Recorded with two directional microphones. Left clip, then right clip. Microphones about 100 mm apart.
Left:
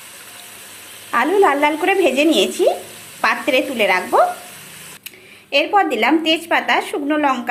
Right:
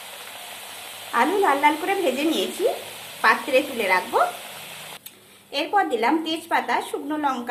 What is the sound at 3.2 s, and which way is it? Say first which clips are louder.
Sizzle: left 2 dB; 50° left (ahead or behind).